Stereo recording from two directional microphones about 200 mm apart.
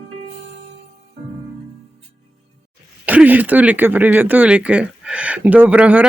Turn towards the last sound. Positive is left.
turn(degrees=-5)  # may be behind; listen again after turning